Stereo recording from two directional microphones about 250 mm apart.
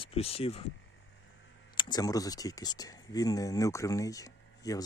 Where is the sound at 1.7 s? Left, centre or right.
Centre.